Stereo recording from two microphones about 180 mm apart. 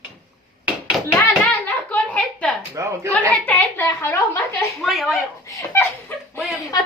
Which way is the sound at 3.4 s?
10° left (ahead or behind).